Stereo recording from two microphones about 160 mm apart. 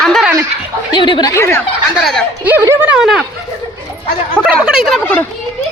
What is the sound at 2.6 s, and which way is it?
Speech, 20° right (ahead or behind).